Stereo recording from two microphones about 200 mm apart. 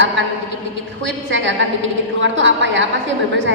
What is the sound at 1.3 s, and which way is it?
A woman's voice, 65° right (ahead or behind).